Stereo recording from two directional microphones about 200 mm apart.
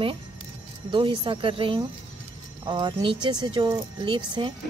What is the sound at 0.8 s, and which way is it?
Speech, 25° right (ahead or behind).